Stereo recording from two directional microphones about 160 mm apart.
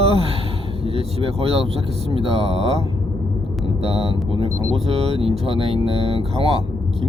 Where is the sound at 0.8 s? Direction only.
35° right (ahead or behind).